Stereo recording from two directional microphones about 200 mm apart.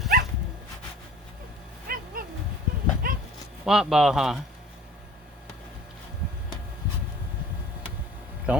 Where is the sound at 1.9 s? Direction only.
45° right (ahead or behind).